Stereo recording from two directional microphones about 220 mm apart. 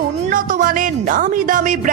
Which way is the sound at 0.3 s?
40° right (ahead or behind).